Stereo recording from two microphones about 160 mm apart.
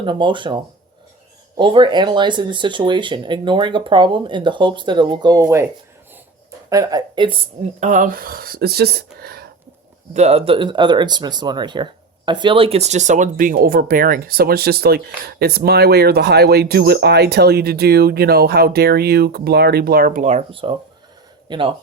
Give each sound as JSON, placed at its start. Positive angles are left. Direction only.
{"t": 0.0, "sound": "speech", "side_deg": -30}
{"t": 7.8, "sound": "speech", "side_deg": -50}
{"t": 9.2, "sound": "a sound", "side_deg": -75}
{"t": 10.2, "sound": "speech", "side_deg": -40}